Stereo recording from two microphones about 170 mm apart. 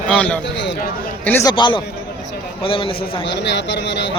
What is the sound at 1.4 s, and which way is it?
A man's voice, 30° left (ahead or behind).